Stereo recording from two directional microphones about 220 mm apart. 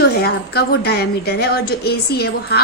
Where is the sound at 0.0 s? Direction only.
45° left (ahead or behind).